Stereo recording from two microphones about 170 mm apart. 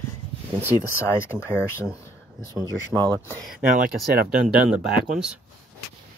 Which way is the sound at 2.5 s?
20° right (ahead or behind).